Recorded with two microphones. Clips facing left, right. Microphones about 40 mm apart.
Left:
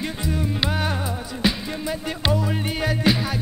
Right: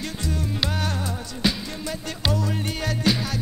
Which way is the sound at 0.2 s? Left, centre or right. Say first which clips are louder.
Left 2 dB; centre.